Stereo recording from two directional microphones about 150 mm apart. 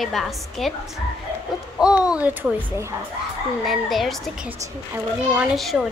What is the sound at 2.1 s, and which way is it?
Speech, 10° right (ahead or behind).